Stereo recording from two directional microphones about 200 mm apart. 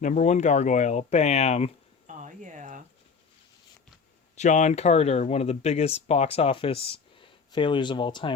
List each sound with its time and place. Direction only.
0.0 s speech: 35° left (ahead or behind)
2.0 s a sound: 40° right (ahead or behind)
4.4 s speech: 35° left (ahead or behind)